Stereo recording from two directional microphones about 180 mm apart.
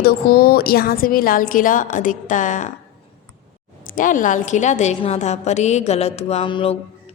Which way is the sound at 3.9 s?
45° left (ahead or behind).